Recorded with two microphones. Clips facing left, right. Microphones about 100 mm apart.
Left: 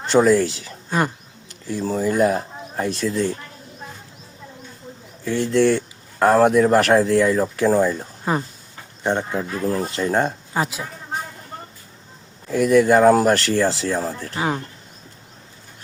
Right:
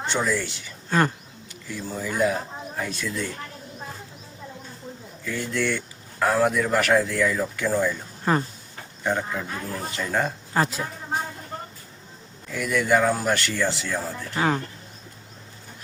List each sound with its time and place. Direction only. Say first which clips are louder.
0.1 s speech: left 12 dB; 55° left (ahead or behind)
0.9 s speech: even; 15° left (ahead or behind)
1.9 s speech: left 6 dB; 35° left (ahead or behind)
5.2 s speech: left 9 dB; 30° left (ahead or behind)
8.2 s speech: even; 10° left (ahead or behind)
9.0 s speech: left 4 dB; 30° left (ahead or behind)
10.5 s speech: even; 5° left (ahead or behind)
12.5 s speech: left 8 dB; 35° left (ahead or behind)
14.3 s speech: right 1 dB; 10° left (ahead or behind)